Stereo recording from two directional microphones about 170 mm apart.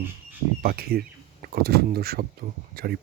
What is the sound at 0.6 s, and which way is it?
Speech, 60° right (ahead or behind).